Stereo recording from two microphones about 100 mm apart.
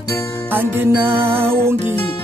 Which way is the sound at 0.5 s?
20° right (ahead or behind).